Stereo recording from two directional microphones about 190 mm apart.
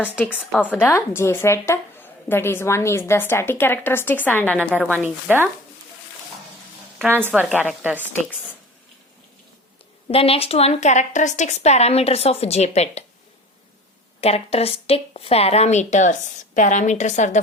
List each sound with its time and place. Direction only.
0.0 s a woman's voice: 10° left (ahead or behind)
4.9 s a woman's voice: 10° right (ahead or behind)
7.2 s a woman's voice: 10° right (ahead or behind)
10.1 s a woman's voice: 30° left (ahead or behind)
14.2 s a woman's voice: 35° left (ahead or behind)